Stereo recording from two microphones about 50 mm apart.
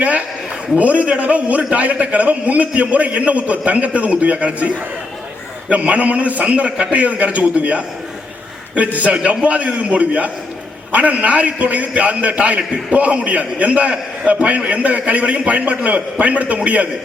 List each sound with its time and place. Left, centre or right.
0.8 s a man's voice: right